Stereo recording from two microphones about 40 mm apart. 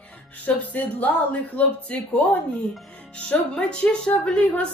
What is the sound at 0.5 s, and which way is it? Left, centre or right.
Speech, left.